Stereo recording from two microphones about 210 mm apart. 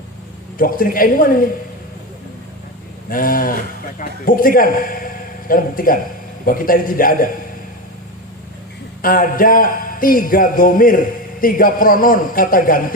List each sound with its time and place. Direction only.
0.6 s a man's voice: 40° left (ahead or behind)
3.1 s a man's voice: 40° left (ahead or behind)
9.0 s a man's voice: 40° left (ahead or behind)